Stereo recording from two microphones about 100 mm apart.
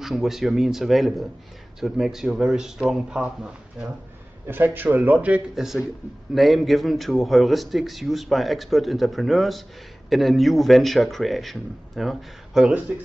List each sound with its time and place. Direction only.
0.0 s a man's voice: centre (ahead or behind)
4.5 s speech: 20° right (ahead or behind)
5.6 s a man's voice: 5° right (ahead or behind)